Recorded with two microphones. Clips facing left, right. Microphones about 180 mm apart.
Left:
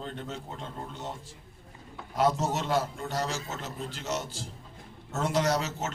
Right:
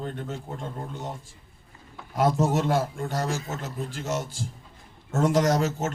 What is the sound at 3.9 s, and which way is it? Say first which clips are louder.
Speech: right 4 dB; 50° right (ahead or behind).